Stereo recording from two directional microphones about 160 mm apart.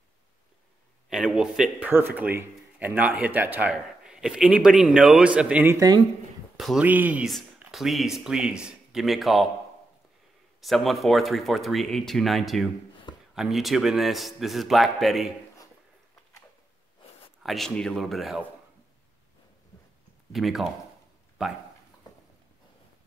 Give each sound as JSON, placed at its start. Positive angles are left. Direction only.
{"t": 1.1, "sound": "speech", "side_deg": -5}
{"t": 10.6, "sound": "speech", "side_deg": 0}
{"t": 17.4, "sound": "speech", "side_deg": 0}
{"t": 20.3, "sound": "speech", "side_deg": 0}